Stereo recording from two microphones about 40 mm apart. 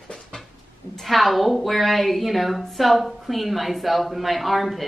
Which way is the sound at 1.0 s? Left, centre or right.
Centre.